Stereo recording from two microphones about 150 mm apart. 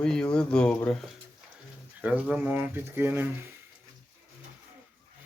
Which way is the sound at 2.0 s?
10° right (ahead or behind).